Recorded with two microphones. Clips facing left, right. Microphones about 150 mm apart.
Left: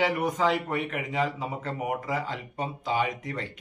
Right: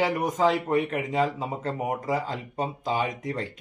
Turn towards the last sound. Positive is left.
turn(degrees=-40)  # may be behind; listen again after turning